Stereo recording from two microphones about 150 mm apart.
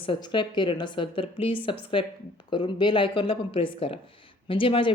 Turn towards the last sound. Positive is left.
turn(degrees=35)  # may be behind; listen again after turning